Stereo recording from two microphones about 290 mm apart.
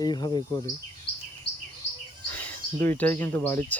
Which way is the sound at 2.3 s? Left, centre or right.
Centre.